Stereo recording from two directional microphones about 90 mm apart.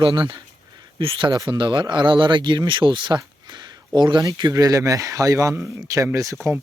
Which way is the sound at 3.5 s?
60° right (ahead or behind).